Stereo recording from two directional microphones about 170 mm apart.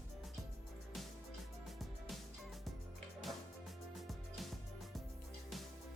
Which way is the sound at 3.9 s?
Centre (ahead or behind).